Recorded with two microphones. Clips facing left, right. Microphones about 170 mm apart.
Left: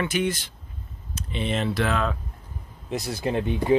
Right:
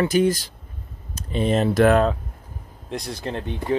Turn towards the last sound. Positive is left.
turn(degrees=10)  # may be behind; listen again after turning